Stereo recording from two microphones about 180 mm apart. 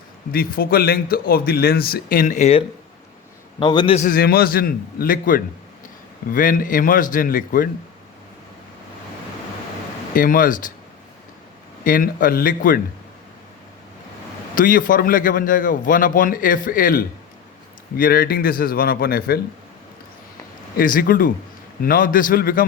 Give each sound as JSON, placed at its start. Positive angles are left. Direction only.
{"t": 0.3, "sound": "speech", "side_deg": 55}
{"t": 3.6, "sound": "a man's voice", "side_deg": 25}
{"t": 3.9, "sound": "a man's voice", "side_deg": 50}
{"t": 10.2, "sound": "a man's voice", "side_deg": 50}
{"t": 11.9, "sound": "a man's voice", "side_deg": 50}
{"t": 14.5, "sound": "a man's voice", "side_deg": 50}
{"t": 20.7, "sound": "a man's voice", "side_deg": 50}